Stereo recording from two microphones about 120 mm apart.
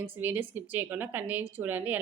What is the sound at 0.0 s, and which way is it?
A woman's voice, 15° right (ahead or behind).